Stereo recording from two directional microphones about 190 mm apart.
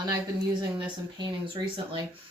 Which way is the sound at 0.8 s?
25° right (ahead or behind).